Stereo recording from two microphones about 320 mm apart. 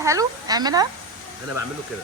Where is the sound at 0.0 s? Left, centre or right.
Centre.